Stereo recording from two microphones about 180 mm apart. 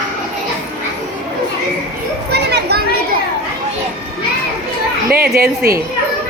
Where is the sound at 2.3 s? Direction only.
65° right (ahead or behind).